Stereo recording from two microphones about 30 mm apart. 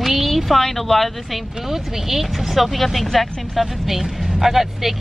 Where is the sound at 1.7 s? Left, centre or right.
Centre.